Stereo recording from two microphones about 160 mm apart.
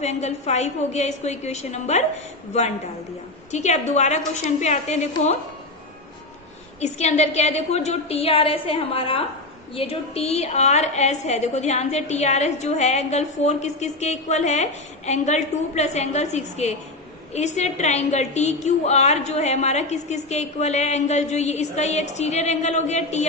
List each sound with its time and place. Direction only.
0.0 s a woman's voice: 45° left (ahead or behind)
6.7 s a woman's voice: 45° left (ahead or behind)